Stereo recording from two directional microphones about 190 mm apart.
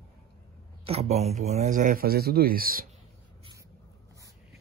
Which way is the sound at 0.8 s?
35° right (ahead or behind).